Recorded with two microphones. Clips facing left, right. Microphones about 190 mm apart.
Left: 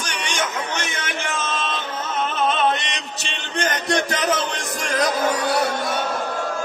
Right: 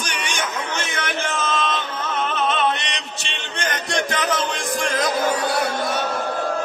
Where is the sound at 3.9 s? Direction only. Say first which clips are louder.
Left 1 dB; 40° left (ahead or behind).